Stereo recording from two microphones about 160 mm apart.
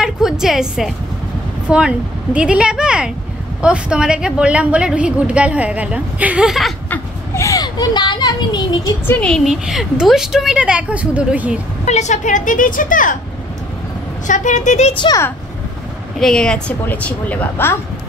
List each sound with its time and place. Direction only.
0.0 s a sound: 5° right (ahead or behind)
1.7 s a woman's voice: 5° right (ahead or behind)
6.9 s a sound: 20° left (ahead or behind)
9.0 s a woman's voice: 10° left (ahead or behind); by 11.6 s 10° right (ahead or behind)
11.8 s speech: 45° left (ahead or behind)
14.2 s speech: 50° left (ahead or behind)
15.0 s speech: 25° left (ahead or behind)
16.2 s a woman's voice: 5° left (ahead or behind)